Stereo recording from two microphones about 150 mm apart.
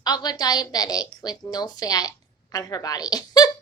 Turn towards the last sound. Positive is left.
turn(degrees=25)  # may be behind; listen again after turning